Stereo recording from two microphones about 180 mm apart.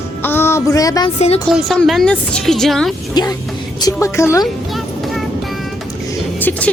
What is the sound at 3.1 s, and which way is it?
A woman's voice, 20° left (ahead or behind).